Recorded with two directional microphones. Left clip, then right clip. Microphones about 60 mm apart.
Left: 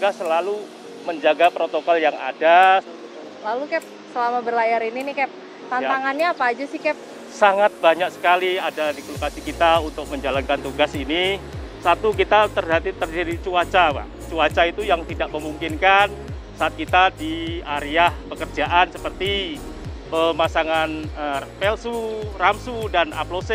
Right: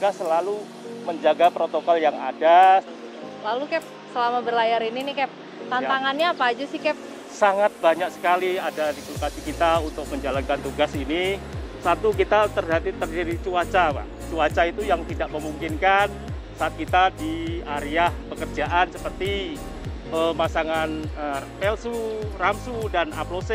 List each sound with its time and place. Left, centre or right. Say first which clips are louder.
0.2 s speech: left 2 dB; left
3.4 s speech: left 2 dB; centre
5.7 s a woman's voice: left 2 dB; centre
5.9 s speech: left 1 dB; centre
7.3 s speech: left 3 dB; left